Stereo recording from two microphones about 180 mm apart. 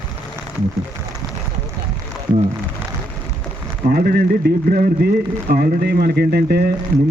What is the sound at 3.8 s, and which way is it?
Speech, 60° right (ahead or behind).